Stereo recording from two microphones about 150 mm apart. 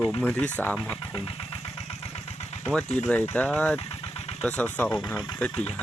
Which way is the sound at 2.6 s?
5° left (ahead or behind).